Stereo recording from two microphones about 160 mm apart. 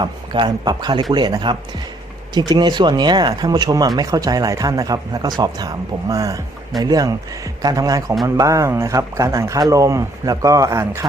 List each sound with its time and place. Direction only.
0.0 s speech: 30° right (ahead or behind)